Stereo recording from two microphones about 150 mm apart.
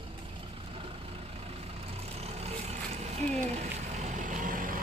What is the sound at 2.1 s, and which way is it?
Vehicle, 40° right (ahead or behind).